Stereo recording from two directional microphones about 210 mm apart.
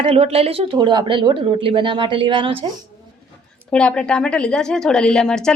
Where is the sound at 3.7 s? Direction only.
5° left (ahead or behind).